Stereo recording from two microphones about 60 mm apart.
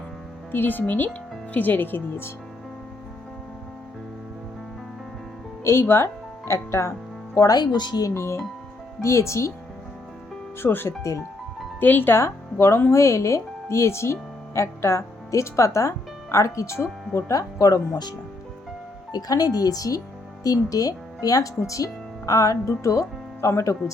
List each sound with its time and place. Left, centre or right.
0.5 s speech: left
5.8 s speech: left
7.3 s speech: left
8.1 s speech: left
10.6 s speech: left
12.1 s speech: left
15.3 s speech: left
17.2 s speech: left
19.3 s speech: left